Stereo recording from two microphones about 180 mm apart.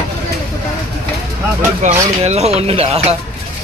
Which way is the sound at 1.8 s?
40° right (ahead or behind).